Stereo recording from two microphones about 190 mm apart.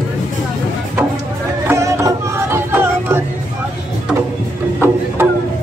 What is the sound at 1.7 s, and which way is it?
Crowd, 15° right (ahead or behind).